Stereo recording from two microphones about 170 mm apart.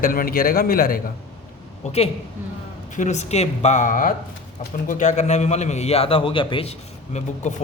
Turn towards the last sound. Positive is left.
turn(degrees=45)  # may be behind; listen again after turning